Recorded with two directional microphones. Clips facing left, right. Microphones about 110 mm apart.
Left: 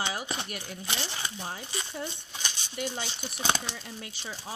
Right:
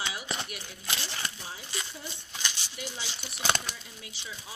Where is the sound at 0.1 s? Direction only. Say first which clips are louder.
Left 2 dB; 45° left (ahead or behind).